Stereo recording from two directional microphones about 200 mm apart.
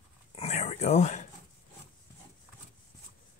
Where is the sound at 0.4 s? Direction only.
35° left (ahead or behind).